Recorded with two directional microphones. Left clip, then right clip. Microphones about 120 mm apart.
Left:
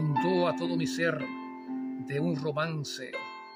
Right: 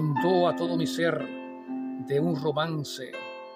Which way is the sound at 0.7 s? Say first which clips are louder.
Right 3 dB; centre (ahead or behind).